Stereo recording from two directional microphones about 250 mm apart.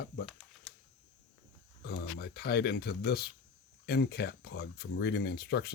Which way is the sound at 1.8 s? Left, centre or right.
Left.